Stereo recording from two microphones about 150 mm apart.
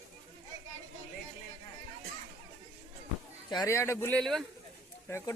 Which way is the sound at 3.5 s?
25° left (ahead or behind).